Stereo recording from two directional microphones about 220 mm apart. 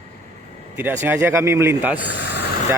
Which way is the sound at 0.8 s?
10° right (ahead or behind).